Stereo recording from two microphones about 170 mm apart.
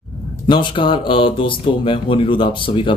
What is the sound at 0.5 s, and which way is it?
Speech, 30° left (ahead or behind).